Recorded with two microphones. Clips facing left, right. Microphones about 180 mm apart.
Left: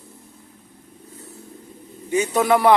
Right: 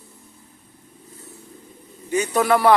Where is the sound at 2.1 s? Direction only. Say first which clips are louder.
Left 1 dB; 20° left (ahead or behind).